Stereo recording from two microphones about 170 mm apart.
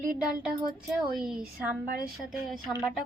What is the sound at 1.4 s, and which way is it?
Speech, 60° right (ahead or behind).